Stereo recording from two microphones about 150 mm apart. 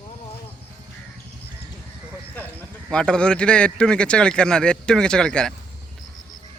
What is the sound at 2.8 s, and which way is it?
Speech, 5° left (ahead or behind).